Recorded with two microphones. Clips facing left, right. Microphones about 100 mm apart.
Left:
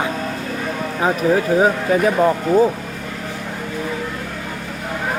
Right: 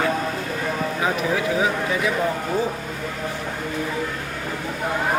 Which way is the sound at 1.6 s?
45° left (ahead or behind).